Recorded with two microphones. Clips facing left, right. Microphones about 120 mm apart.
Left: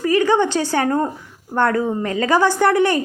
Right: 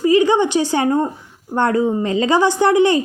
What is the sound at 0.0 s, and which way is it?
A woman's voice, 20° right (ahead or behind).